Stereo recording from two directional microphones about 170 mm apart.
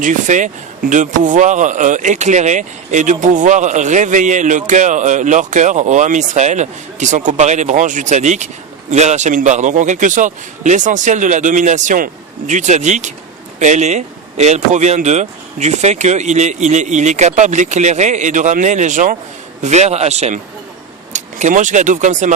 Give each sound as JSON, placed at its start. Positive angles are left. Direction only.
{"t": 0.0, "sound": "a man's voice", "side_deg": -50}